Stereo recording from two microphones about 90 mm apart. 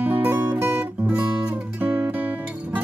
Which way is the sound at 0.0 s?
20° right (ahead or behind).